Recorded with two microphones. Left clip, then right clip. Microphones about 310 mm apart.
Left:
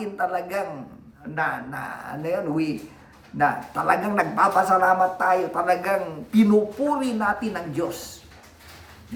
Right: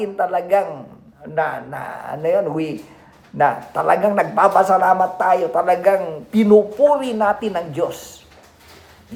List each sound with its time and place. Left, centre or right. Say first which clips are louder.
0.0 s a man's voice: right 6 dB; centre